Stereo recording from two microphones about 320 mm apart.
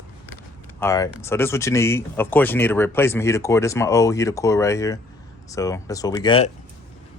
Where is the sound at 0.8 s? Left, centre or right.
Centre.